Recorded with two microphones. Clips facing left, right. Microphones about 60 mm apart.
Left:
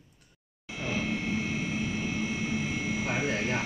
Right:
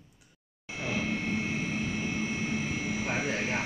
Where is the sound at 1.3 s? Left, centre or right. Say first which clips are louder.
Even; right.